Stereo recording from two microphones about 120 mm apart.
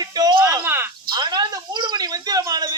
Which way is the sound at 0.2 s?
35° right (ahead or behind).